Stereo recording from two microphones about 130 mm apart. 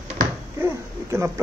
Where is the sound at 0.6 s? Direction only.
20° right (ahead or behind).